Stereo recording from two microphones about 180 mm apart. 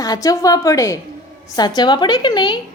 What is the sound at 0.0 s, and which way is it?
A woman's voice, 20° left (ahead or behind).